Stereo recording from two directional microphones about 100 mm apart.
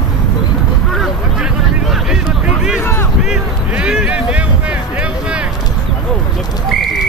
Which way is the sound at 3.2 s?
10° right (ahead or behind).